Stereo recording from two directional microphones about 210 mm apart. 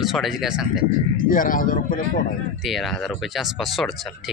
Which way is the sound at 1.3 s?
40° left (ahead or behind).